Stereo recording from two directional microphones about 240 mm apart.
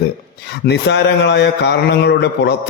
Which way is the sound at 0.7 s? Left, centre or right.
Left.